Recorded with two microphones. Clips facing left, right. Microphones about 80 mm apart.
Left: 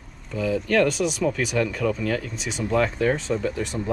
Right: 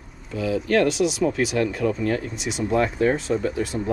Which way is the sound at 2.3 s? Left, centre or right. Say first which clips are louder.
Right 2 dB; centre.